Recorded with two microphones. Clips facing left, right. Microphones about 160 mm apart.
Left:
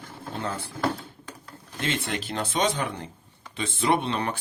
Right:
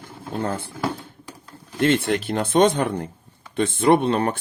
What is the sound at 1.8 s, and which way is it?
Speech, 55° right (ahead or behind).